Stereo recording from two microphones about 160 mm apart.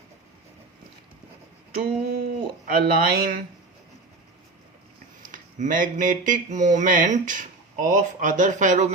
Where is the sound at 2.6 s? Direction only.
65° right (ahead or behind).